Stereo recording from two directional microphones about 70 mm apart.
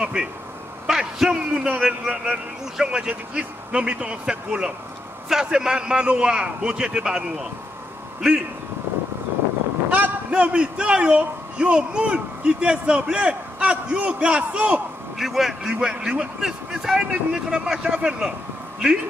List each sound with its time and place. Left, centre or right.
0.0 s a sound: centre
0.8 s a man's voice: centre
1.5 s a man's voice: centre
9.8 s a man's voice: right
15.1 s a man's voice: centre